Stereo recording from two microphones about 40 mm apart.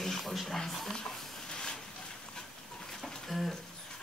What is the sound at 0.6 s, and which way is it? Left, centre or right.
Speech, centre.